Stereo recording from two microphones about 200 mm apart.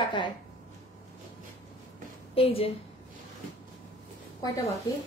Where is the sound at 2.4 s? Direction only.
30° left (ahead or behind).